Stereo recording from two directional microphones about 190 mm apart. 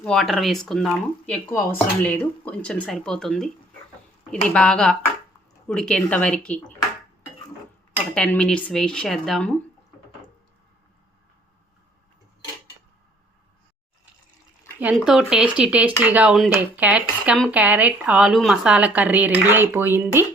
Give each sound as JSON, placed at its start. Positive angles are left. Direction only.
{"t": 0.0, "sound": "speech", "side_deg": 0}
{"t": 8.1, "sound": "speech", "side_deg": 5}
{"t": 14.8, "sound": "speech", "side_deg": -5}